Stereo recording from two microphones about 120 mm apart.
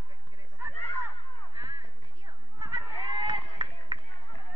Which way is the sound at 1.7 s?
40° right (ahead or behind).